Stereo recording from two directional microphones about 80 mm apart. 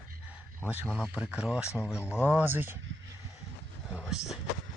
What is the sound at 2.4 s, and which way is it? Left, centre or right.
Speech, right.